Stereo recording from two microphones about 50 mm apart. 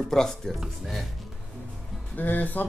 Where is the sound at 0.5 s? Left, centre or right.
Centre.